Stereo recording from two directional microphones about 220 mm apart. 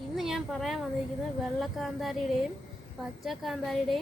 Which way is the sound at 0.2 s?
Centre (ahead or behind).